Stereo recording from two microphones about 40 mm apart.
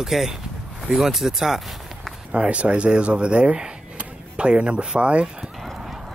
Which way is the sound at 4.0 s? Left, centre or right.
Right.